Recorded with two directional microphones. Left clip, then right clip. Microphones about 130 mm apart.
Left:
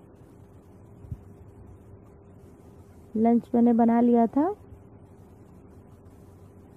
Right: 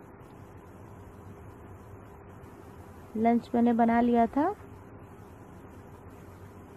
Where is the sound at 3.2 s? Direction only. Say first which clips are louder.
Left 3 dB; 35° left (ahead or behind).